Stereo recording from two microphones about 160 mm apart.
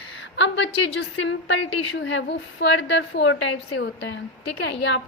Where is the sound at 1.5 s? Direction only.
90° left.